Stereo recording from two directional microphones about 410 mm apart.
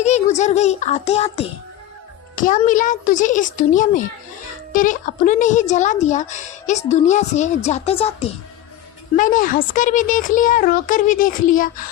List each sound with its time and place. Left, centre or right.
0.0 s a child's voice: centre